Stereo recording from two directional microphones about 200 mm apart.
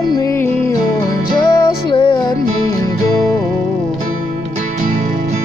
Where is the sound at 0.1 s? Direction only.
15° left (ahead or behind).